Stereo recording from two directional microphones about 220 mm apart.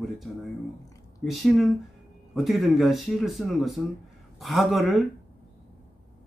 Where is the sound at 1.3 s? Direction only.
Centre (ahead or behind).